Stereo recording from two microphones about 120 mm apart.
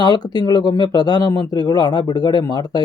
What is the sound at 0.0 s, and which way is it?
Speech, 35° left (ahead or behind).